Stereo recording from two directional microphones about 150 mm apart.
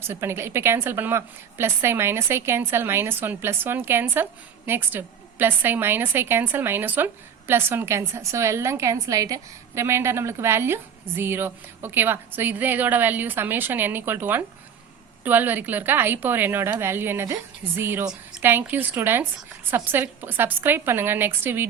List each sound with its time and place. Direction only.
0.1 s a woman's voice: 15° right (ahead or behind)